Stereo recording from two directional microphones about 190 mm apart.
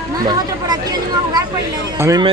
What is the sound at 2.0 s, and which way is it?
Speech, 15° right (ahead or behind).